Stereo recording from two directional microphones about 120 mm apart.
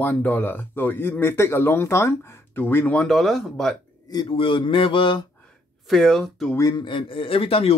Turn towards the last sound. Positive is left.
turn(degrees=50)  # may be behind; listen again after turning